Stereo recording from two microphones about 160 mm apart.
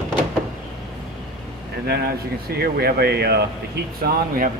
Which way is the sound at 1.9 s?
85° right.